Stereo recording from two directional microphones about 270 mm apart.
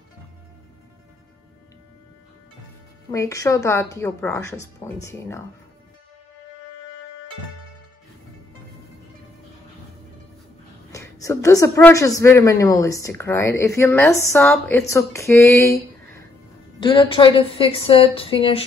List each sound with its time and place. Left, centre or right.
3.1 s speech: centre
10.9 s speech: centre
16.8 s a woman's voice: centre